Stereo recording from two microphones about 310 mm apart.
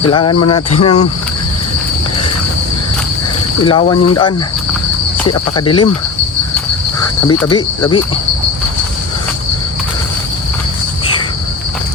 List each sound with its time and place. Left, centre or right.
0.1 s cricket: centre
3.6 s cricket: centre
5.5 s cricket: centre
7.3 s cricket: centre